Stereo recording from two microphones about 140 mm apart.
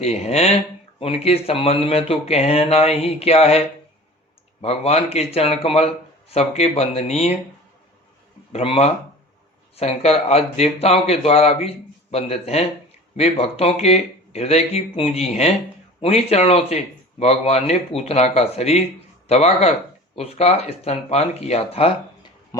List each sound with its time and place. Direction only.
0.0 s speech: 50° left (ahead or behind)
8.5 s speech: 45° left (ahead or behind)